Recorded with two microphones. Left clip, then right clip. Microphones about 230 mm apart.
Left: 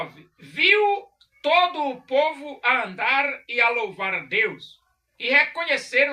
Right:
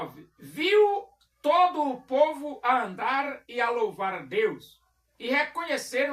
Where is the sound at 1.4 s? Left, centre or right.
Centre.